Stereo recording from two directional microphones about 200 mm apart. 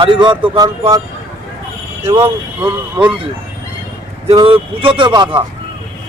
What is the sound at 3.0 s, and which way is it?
Speech, 25° right (ahead or behind).